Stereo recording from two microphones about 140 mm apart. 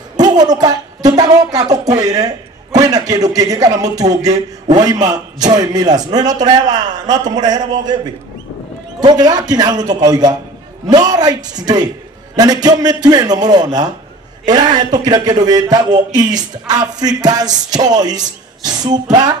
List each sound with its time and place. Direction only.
0.2 s speech: 30° right (ahead or behind)
9.0 s speech: 30° right (ahead or behind)